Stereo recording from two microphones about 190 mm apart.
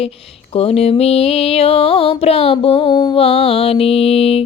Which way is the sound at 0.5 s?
30° left (ahead or behind).